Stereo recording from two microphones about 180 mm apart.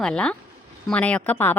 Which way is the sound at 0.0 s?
5° left (ahead or behind).